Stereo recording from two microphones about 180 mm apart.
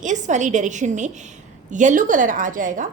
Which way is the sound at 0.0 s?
40° right (ahead or behind).